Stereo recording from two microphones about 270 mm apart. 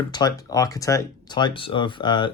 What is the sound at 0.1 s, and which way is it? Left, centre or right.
Speech, centre.